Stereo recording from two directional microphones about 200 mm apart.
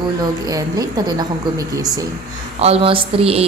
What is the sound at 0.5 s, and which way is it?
Speech, 20° right (ahead or behind).